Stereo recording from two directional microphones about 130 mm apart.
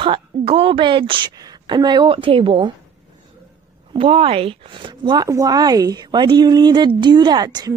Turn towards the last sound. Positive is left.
turn(degrees=-30)  # may be behind; listen again after turning